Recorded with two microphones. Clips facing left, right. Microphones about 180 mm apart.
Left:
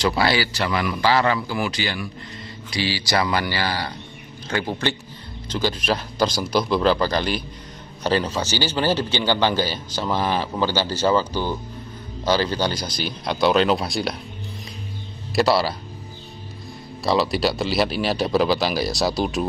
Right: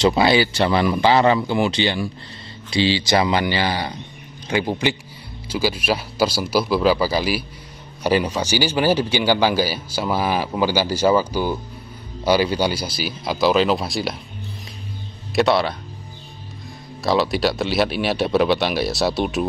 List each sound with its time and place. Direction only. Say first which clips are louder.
0.0 s a man's voice: right 5 dB; 20° right (ahead or behind); by 14.2 s centre (ahead or behind)
15.3 s a man's voice: right 1 dB; centre (ahead or behind)
17.0 s a man's voice: right 1 dB; centre (ahead or behind)